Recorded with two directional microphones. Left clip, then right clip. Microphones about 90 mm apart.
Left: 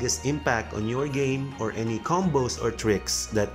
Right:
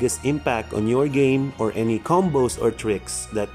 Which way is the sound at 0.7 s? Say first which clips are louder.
Right 8 dB; 55° right (ahead or behind).